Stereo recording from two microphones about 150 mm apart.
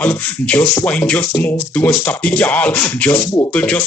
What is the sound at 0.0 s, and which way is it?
Speech, 10° left (ahead or behind).